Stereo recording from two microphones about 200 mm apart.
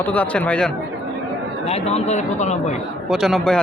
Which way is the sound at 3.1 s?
Centre (ahead or behind).